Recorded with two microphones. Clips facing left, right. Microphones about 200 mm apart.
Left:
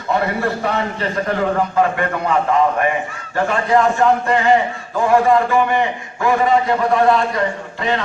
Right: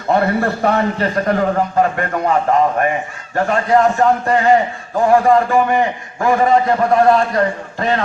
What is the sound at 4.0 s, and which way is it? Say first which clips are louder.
Speech: right 1 dB; 40° right (ahead or behind).